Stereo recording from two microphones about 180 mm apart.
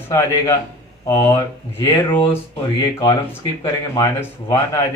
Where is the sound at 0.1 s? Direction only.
15° left (ahead or behind).